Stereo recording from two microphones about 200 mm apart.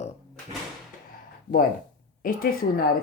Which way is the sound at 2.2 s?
45° left (ahead or behind).